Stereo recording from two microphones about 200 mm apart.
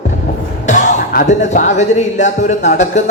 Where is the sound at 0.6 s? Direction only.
35° left (ahead or behind).